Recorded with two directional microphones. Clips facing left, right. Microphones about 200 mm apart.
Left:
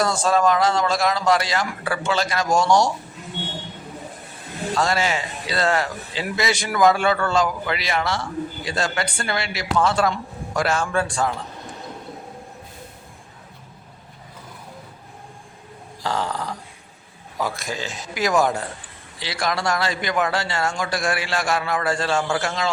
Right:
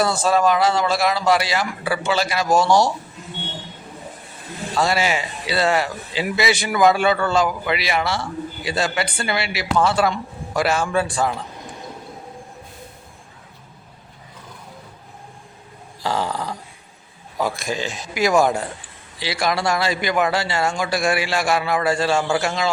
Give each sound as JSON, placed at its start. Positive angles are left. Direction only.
{"t": 0.0, "sound": "speech", "side_deg": -5}
{"t": 4.7, "sound": "speech", "side_deg": -5}
{"t": 16.0, "sound": "speech", "side_deg": -10}
{"t": 17.4, "sound": "speech", "side_deg": -15}